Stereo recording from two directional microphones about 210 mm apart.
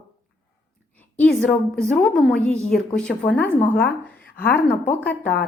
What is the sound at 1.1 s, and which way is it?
A woman's voice, 5° left (ahead or behind).